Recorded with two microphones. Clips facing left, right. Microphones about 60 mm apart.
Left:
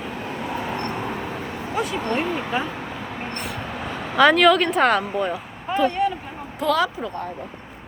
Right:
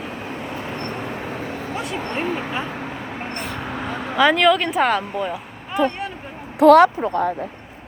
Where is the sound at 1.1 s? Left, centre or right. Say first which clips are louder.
Right 1 dB; right.